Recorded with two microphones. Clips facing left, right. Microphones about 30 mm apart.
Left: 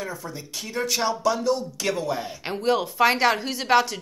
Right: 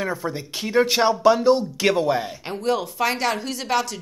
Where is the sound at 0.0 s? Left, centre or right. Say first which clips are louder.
Right 7 dB; right.